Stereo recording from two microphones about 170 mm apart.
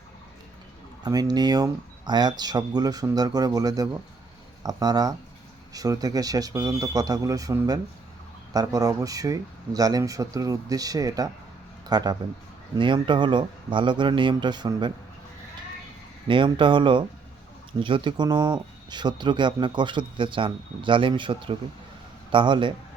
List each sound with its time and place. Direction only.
1.0 s a man's voice: 25° right (ahead or behind)
16.2 s a man's voice: 30° right (ahead or behind)